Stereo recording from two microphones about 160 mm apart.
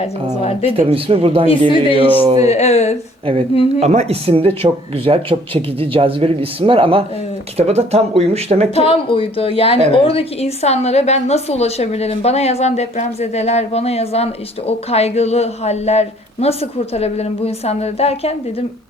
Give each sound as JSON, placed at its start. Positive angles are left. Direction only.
{"t": 0.7, "sound": "speech", "side_deg": -35}
{"t": 1.7, "sound": "a woman's voice", "side_deg": 35}
{"t": 3.8, "sound": "speech", "side_deg": -45}
{"t": 8.7, "sound": "a woman's voice", "side_deg": 35}